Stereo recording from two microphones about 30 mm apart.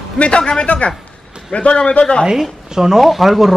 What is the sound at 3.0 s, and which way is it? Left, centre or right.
Speech, centre.